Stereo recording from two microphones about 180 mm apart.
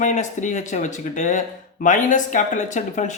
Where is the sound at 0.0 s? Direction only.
45° left (ahead or behind).